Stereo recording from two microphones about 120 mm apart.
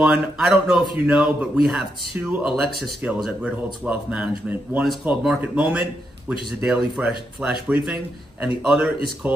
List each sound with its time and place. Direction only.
0.0 s a man's voice: 5° right (ahead or behind)